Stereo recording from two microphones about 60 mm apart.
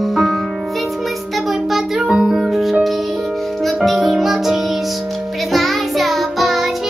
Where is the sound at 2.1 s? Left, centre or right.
Centre.